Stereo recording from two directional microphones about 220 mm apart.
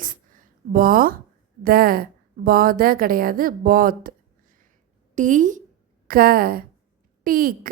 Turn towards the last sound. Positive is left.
turn(degrees=-40)  # may be behind; listen again after turning